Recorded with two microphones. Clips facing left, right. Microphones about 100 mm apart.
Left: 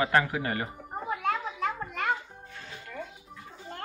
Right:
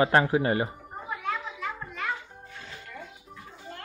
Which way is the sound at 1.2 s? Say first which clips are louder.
Left 3 dB; 55° left (ahead or behind).